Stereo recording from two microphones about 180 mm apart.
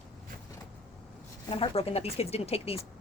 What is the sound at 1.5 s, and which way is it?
Speech, 35° left (ahead or behind).